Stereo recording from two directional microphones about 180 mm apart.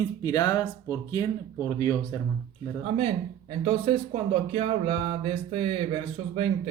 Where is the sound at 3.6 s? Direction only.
30° right (ahead or behind).